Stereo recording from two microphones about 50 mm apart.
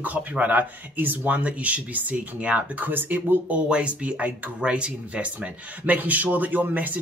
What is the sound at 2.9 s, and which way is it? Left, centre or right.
Speech, right.